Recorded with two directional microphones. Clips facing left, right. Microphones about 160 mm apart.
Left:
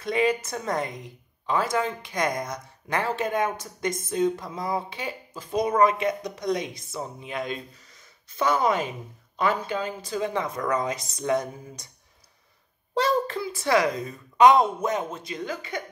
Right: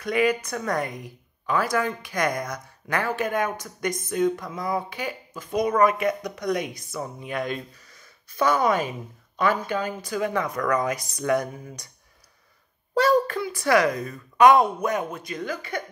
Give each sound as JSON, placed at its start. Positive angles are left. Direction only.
{"t": 0.0, "sound": "a woman's voice", "side_deg": 25}
{"t": 12.9, "sound": "a woman's voice", "side_deg": 25}